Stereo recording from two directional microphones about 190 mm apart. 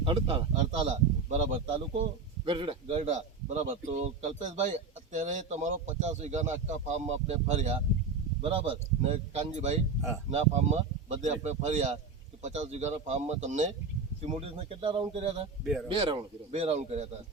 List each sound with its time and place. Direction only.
0.0 s a man's voice: 30° right (ahead or behind)